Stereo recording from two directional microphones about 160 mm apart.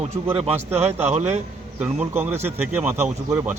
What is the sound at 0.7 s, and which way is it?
Speech, 15° right (ahead or behind).